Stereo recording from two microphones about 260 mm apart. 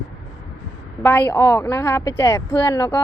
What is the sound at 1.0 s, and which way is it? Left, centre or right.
A woman's voice, centre.